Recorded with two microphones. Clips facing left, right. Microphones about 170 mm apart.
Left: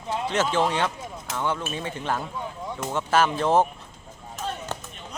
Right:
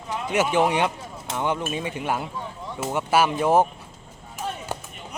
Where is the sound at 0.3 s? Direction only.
15° right (ahead or behind).